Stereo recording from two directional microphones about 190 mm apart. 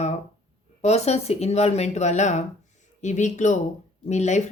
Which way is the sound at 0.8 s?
35° left (ahead or behind).